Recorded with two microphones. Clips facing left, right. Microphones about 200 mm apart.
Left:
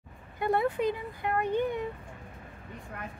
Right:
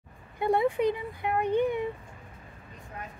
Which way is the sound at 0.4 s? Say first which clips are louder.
Right 2 dB; 15° right (ahead or behind).